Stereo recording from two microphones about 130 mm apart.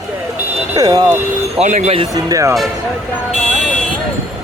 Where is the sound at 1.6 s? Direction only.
65° right (ahead or behind).